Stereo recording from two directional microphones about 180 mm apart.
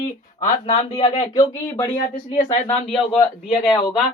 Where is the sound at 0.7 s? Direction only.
40° left (ahead or behind).